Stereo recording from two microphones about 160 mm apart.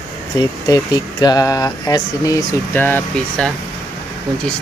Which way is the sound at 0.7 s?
25° left (ahead or behind).